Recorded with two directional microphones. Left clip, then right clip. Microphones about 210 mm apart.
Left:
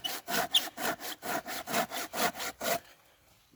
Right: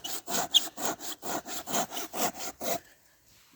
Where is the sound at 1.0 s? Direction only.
Centre (ahead or behind).